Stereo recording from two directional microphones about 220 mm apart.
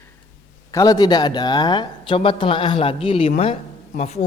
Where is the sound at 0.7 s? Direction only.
15° left (ahead or behind).